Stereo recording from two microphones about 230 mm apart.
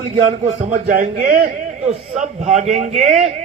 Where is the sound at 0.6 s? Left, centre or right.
Right.